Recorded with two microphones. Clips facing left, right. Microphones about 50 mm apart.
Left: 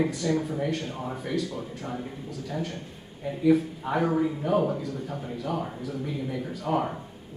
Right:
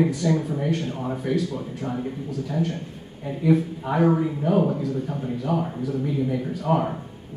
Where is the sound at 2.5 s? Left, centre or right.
Centre.